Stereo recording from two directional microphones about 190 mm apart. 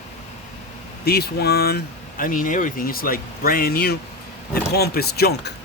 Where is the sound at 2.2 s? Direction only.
45° left (ahead or behind).